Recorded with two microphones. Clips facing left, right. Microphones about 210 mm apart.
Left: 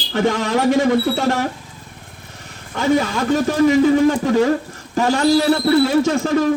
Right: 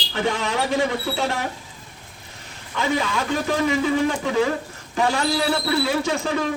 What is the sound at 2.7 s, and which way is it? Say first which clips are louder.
Speech: left 6 dB; 45° left (ahead or behind).